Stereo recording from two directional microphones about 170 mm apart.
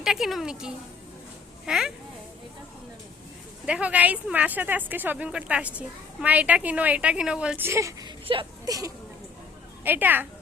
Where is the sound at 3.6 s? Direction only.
5° right (ahead or behind).